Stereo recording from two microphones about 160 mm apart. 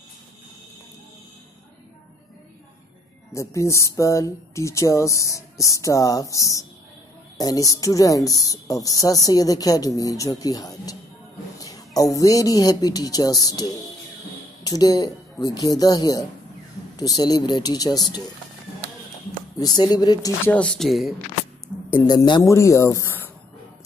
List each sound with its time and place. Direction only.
3.3 s speech: 20° left (ahead or behind)
19.6 s speech: 25° left (ahead or behind)
20.5 s a woman's voice: 5° left (ahead or behind)
22.0 s speech: 25° left (ahead or behind)